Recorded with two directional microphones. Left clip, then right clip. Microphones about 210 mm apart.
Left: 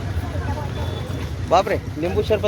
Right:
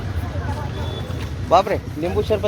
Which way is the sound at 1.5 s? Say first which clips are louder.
Right 2 dB; 15° right (ahead or behind).